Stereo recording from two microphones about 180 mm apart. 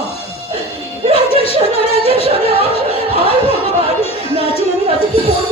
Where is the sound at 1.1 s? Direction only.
30° left (ahead or behind).